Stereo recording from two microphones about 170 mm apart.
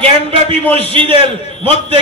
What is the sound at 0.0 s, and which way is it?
Speech, 35° right (ahead or behind).